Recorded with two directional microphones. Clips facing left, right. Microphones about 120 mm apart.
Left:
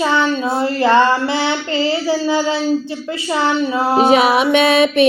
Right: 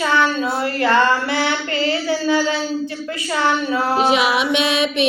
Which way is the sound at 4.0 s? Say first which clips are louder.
Left 6 dB; 45° left (ahead or behind).